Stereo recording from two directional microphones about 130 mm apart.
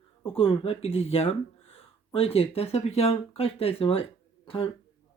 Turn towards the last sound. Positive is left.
turn(degrees=45)  # may be behind; listen again after turning